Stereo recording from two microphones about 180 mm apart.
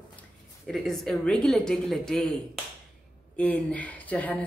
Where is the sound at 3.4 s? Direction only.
10° left (ahead or behind).